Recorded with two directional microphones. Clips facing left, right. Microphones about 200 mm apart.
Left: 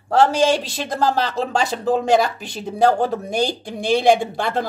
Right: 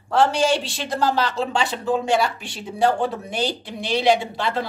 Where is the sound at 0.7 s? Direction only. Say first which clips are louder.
Left 2 dB; 40° left (ahead or behind).